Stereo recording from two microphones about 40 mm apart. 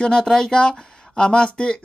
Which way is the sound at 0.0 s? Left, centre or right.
Centre.